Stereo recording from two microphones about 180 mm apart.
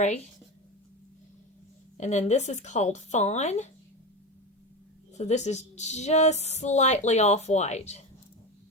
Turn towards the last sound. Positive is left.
turn(degrees=40)  # may be behind; listen again after turning